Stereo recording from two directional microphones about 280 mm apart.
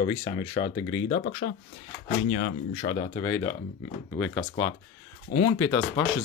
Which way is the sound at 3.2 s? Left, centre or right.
Centre.